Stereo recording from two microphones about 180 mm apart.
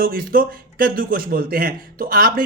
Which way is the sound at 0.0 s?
50° right (ahead or behind).